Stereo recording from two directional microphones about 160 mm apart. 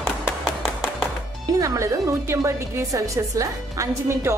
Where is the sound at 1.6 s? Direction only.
20° right (ahead or behind).